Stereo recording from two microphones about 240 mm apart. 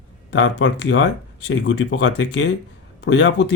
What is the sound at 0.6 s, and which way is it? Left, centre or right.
Speech, left.